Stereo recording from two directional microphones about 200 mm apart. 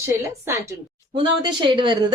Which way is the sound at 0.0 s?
15° right (ahead or behind).